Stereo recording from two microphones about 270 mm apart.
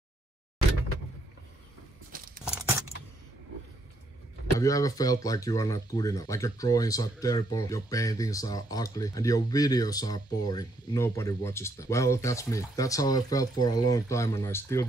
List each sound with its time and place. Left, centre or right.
2.1 s tearing: right
4.6 s speech: centre